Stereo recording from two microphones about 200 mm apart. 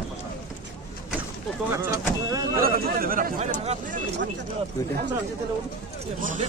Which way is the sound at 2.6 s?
45° right (ahead or behind).